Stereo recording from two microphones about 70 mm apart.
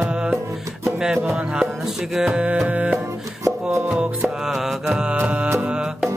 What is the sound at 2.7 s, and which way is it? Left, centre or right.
Music, right.